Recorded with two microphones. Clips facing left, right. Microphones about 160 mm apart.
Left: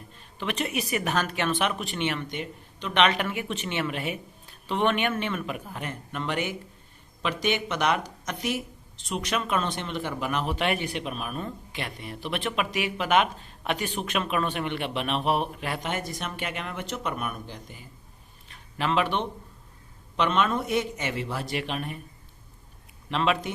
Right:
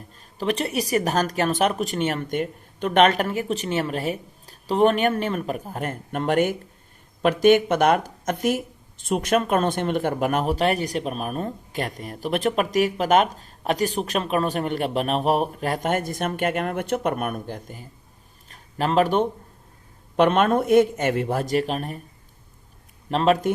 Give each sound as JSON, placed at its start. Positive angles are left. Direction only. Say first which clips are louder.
{"t": 0.3, "sound": "speech", "louder": "right 5 dB", "side_deg": -35}
{"t": 18.4, "sound": "a sound", "louder": "right 4 dB", "side_deg": -40}
{"t": 20.1, "sound": "speech", "louder": "right 7 dB", "side_deg": -50}
{"t": 23.0, "sound": "speech", "louder": "right 6 dB", "side_deg": -40}